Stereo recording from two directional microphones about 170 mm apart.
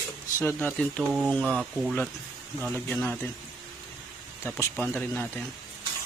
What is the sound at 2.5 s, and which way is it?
Speech, 10° left (ahead or behind).